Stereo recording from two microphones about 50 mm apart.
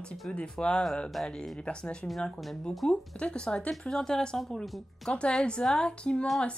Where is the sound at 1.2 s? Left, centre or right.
Centre.